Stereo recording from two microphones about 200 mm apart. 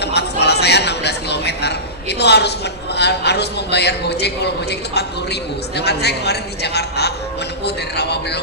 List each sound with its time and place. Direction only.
0.0 s a man's voice: 55° left (ahead or behind)